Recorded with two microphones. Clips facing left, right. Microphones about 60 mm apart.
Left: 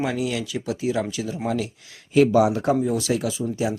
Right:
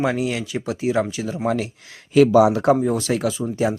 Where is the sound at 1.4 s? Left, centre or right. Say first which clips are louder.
Right 4 dB; right.